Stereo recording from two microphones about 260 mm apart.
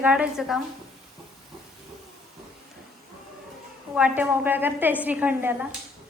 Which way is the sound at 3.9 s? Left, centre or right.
Centre.